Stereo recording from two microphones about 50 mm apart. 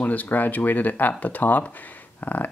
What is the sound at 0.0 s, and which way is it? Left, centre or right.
Speech, left.